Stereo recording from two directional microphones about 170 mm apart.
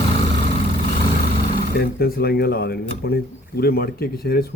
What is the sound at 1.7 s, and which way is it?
Speech, 65° left (ahead or behind).